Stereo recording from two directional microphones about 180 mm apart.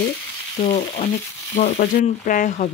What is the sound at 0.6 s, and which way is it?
Speech, 35° left (ahead or behind).